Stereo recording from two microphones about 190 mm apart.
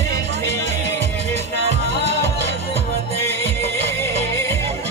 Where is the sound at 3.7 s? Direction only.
15° left (ahead or behind).